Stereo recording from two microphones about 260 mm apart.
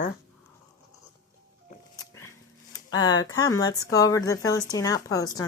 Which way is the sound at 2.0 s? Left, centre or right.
Centre.